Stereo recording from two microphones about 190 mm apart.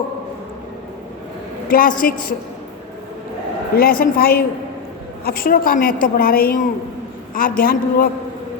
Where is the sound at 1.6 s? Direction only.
45° left (ahead or behind).